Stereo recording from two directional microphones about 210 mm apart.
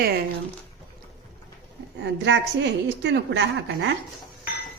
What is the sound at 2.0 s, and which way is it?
A woman's voice, 55° right (ahead or behind).